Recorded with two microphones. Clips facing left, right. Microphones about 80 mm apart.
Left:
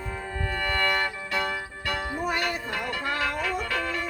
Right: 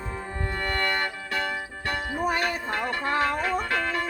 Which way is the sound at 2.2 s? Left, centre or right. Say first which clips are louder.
Right 3 dB; right.